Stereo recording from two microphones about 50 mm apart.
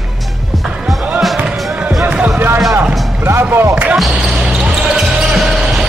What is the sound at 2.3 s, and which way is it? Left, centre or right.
Music, right.